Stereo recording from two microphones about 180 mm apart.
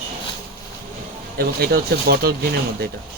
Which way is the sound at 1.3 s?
60° right (ahead or behind).